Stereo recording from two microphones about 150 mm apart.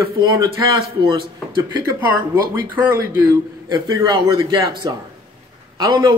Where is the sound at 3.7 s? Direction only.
25° right (ahead or behind).